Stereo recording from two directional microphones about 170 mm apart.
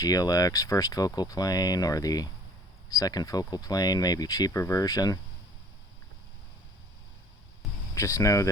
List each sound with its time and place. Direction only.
0.0 s speech: 20° left (ahead or behind)
7.9 s speech: 20° left (ahead or behind)